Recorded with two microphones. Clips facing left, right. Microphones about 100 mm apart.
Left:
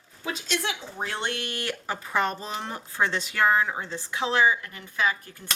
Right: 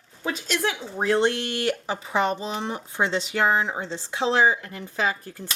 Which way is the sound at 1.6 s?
15° right (ahead or behind).